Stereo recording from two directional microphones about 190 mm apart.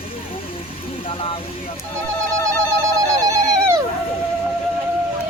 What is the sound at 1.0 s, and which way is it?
Vehicle, 30° left (ahead or behind).